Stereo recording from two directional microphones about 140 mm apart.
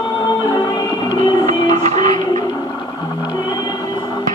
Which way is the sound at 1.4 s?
55° right (ahead or behind).